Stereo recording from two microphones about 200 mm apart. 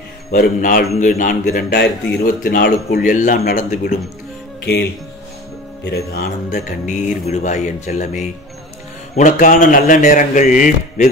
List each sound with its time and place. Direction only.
0.3 s a man's voice: 45° left (ahead or behind)
5.9 s speech: 50° left (ahead or behind)